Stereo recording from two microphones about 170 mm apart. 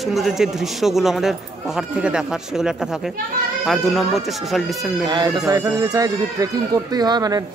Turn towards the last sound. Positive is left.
turn(degrees=-25)  # may be behind; listen again after turning